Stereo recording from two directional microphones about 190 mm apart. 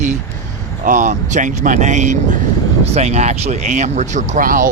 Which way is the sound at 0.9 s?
40° right (ahead or behind).